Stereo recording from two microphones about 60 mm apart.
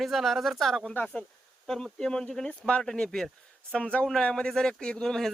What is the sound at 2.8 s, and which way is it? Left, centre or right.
Speech, centre.